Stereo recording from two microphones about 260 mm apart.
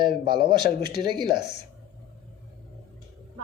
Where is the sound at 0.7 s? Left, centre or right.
Left.